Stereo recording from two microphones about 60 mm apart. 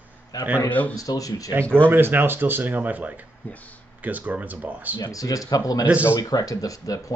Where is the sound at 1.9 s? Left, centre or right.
Right.